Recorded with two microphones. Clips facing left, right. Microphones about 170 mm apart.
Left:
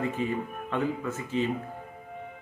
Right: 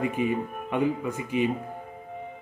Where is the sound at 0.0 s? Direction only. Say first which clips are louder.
Right 3 dB; 15° right (ahead or behind).